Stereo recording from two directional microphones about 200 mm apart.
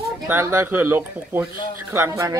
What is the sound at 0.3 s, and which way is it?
Speech, 10° right (ahead or behind).